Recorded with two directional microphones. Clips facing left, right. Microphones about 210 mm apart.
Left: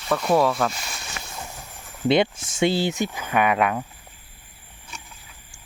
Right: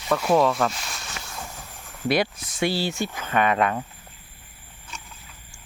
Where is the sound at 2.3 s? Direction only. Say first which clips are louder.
Even; 45° left (ahead or behind).